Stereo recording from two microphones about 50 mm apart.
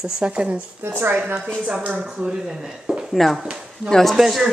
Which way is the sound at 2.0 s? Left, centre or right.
Centre.